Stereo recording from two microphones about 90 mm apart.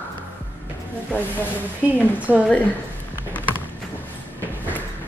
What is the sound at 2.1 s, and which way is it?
Speech, 15° right (ahead or behind).